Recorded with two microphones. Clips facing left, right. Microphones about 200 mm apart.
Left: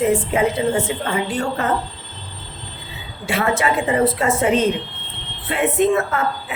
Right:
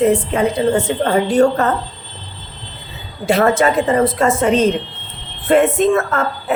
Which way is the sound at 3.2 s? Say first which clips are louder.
Right 6 dB; 40° right (ahead or behind).